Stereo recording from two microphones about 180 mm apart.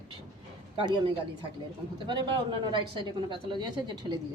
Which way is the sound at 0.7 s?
25° right (ahead or behind).